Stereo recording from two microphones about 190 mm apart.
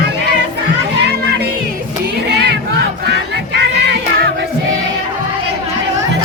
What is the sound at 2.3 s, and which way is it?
Crowd, 60° right (ahead or behind).